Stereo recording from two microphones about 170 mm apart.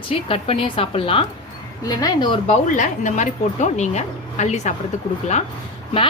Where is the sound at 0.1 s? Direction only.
30° left (ahead or behind).